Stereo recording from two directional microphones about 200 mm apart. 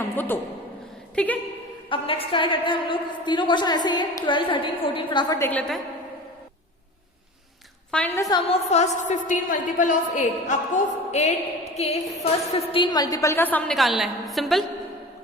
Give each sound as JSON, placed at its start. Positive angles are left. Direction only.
{"t": 1.1, "sound": "a woman's voice", "side_deg": 5}
{"t": 1.9, "sound": "a woman's voice", "side_deg": 25}
{"t": 7.9, "sound": "a woman's voice", "side_deg": 5}
{"t": 8.4, "sound": "a woman's voice", "side_deg": 35}